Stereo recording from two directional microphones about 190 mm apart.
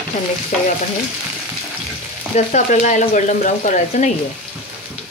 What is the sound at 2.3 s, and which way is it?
Speech, 40° left (ahead or behind).